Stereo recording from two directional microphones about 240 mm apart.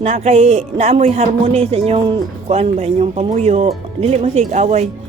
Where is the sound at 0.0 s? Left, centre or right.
Right.